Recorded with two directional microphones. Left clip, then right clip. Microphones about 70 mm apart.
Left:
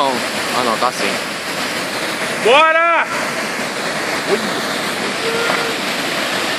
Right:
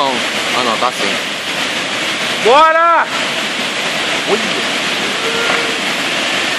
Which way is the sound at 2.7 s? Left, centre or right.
Right.